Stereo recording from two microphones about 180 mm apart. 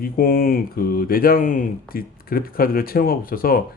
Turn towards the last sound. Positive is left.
turn(degrees=55)  # may be behind; listen again after turning